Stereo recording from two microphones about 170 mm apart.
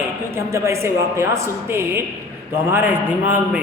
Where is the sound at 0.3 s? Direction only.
15° right (ahead or behind).